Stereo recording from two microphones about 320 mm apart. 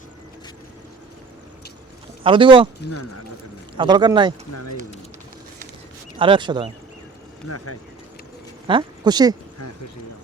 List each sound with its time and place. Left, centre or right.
2.2 s speech: centre
2.9 s speech: left
3.8 s speech: centre
6.1 s speech: centre
7.4 s speech: left
8.6 s speech: centre